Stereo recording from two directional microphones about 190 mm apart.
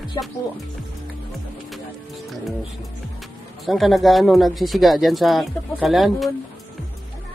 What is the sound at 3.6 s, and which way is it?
Speech, centre (ahead or behind).